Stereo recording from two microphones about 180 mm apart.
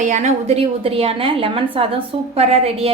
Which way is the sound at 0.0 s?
40° right (ahead or behind).